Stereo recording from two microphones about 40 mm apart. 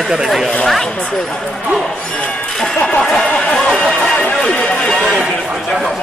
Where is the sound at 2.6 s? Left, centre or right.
Centre.